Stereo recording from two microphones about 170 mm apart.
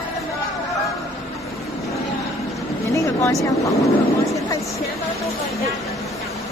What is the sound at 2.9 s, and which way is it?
Speech, 20° left (ahead or behind).